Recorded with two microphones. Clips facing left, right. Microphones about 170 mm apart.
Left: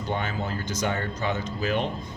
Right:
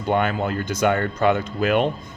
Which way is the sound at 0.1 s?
60° right (ahead or behind).